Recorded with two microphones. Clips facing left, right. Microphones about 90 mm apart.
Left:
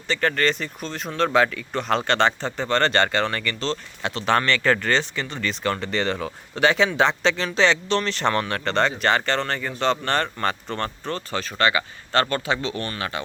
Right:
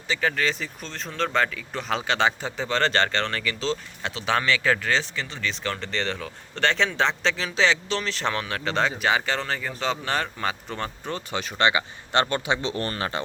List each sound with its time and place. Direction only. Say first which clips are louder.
0.1 s speech: left 3 dB; 5° right (ahead or behind); by 12.8 s 20° right (ahead or behind)
12.8 s speech: right 1 dB; 35° right (ahead or behind)